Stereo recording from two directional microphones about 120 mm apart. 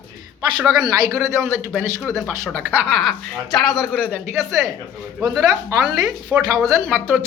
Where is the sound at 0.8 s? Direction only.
30° right (ahead or behind).